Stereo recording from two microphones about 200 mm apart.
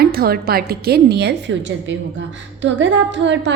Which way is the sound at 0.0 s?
50° right (ahead or behind).